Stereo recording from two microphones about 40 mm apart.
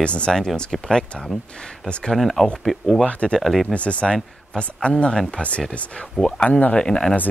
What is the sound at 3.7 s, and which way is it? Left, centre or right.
Speech, left.